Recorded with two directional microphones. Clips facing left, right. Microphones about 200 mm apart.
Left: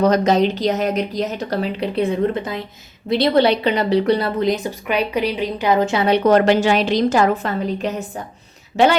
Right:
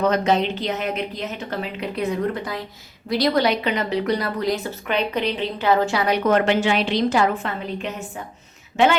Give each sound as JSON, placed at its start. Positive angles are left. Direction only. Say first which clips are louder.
{"t": 0.0, "sound": "a woman's voice", "louder": "left 4 dB", "side_deg": 40}